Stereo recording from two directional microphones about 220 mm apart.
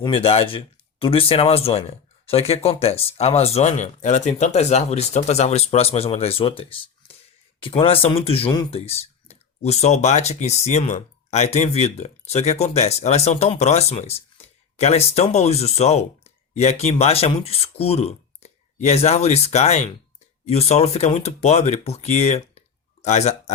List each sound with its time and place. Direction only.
0.0 s speech: 25° left (ahead or behind)